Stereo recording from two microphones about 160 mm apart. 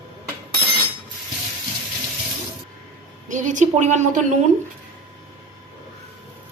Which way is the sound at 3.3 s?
50° right (ahead or behind).